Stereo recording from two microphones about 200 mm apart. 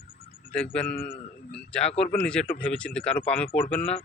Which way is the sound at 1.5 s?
5° left (ahead or behind).